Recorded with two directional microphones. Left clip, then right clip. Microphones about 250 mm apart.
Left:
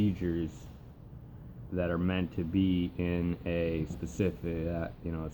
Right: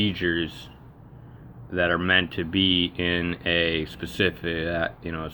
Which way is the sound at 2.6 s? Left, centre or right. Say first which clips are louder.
Right 10 dB; right.